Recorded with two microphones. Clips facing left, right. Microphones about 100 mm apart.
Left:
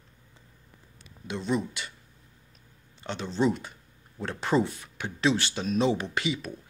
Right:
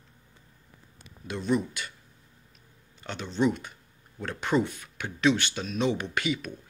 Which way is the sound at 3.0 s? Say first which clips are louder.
Even; 30° left (ahead or behind).